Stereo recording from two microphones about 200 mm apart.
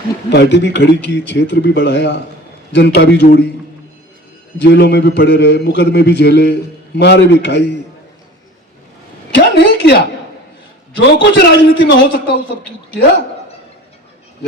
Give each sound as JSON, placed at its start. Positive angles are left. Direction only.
{"t": 0.3, "sound": "a man's voice", "side_deg": 60}
{"t": 4.5, "sound": "a man's voice", "side_deg": 60}
{"t": 9.3, "sound": "a woman's voice", "side_deg": 60}
{"t": 11.2, "sound": "a man's voice", "side_deg": 60}